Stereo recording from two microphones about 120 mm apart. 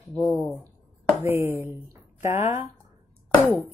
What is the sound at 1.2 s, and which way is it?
Speech, 20° right (ahead or behind).